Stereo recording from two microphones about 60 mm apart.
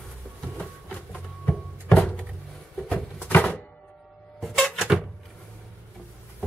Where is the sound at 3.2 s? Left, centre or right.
Left.